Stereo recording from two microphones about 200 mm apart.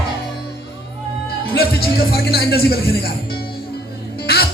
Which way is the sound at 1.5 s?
50° left (ahead or behind).